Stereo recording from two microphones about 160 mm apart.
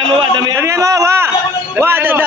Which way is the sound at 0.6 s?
20° right (ahead or behind).